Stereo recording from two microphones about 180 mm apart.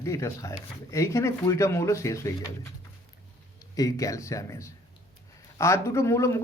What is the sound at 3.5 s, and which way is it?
Speech, 20° left (ahead or behind).